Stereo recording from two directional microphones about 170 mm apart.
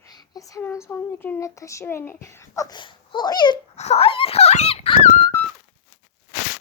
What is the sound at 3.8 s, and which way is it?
Speech, 35° left (ahead or behind).